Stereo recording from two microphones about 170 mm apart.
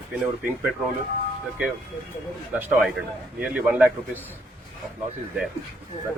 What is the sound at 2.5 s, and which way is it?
Speech, 10° right (ahead or behind).